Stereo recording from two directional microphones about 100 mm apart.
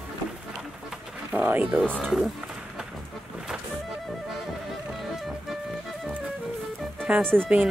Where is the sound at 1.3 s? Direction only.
15° right (ahead or behind).